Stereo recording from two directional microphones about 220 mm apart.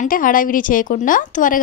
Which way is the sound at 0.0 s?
40° left (ahead or behind).